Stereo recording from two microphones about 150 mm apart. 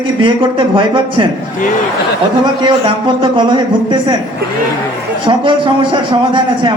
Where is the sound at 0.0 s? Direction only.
35° right (ahead or behind).